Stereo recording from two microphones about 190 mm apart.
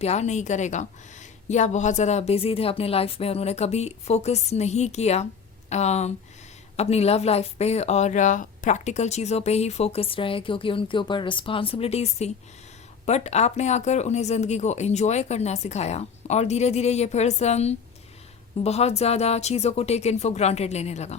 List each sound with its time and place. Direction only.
0.0 s speech: 35° left (ahead or behind)